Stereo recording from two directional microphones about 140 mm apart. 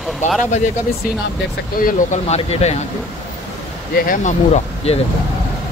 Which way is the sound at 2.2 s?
50° left (ahead or behind).